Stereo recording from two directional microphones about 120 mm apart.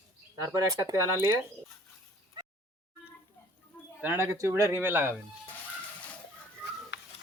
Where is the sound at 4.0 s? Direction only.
15° right (ahead or behind).